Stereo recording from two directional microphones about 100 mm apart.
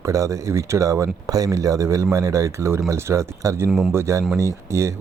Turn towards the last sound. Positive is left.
turn(degrees=-30)  # may be behind; listen again after turning